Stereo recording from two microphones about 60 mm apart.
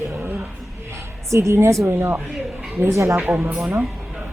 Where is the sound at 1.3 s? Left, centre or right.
Right.